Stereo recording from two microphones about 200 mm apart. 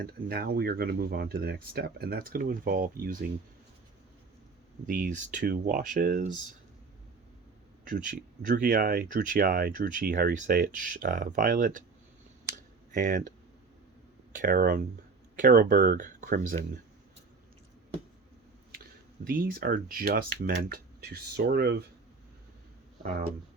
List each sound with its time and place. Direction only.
0.0 s speech: 50° right (ahead or behind)
4.9 s speech: 40° right (ahead or behind)
7.9 s speech: 40° right (ahead or behind)
12.9 s speech: 40° right (ahead or behind)
14.3 s speech: 45° right (ahead or behind)
18.7 s speech: 45° right (ahead or behind)